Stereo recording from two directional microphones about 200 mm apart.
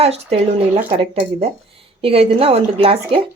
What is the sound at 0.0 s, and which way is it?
A woman's voice, 30° right (ahead or behind).